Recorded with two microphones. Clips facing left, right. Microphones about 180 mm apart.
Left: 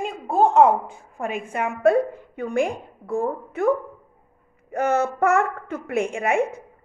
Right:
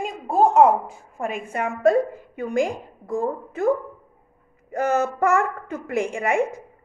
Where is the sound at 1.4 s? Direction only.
55° left (ahead or behind).